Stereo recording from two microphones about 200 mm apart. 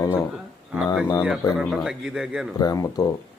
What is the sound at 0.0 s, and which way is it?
Speech, 15° left (ahead or behind).